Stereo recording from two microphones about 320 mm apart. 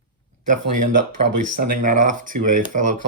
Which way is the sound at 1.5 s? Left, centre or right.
Right.